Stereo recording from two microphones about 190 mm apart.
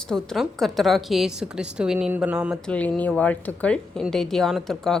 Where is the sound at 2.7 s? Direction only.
5° left (ahead or behind).